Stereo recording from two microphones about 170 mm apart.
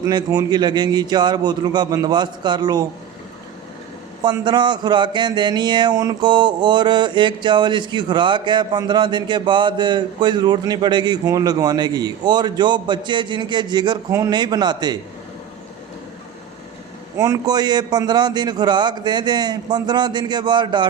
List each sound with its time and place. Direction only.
0.0 s speech: 25° right (ahead or behind)
4.2 s speech: 25° right (ahead or behind)
17.2 s speech: 20° right (ahead or behind)